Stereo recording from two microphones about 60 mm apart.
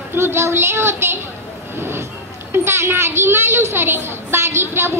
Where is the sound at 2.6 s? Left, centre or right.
Right.